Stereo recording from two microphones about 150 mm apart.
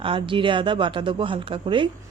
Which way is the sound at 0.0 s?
35° right (ahead or behind).